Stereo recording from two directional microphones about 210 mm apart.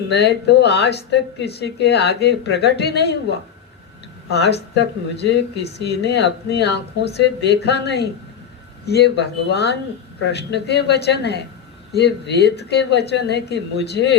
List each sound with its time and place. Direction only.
0.1 s speech: 50° left (ahead or behind)